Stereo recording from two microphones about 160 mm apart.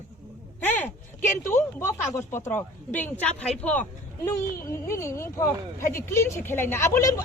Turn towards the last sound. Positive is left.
turn(degrees=20)  # may be behind; listen again after turning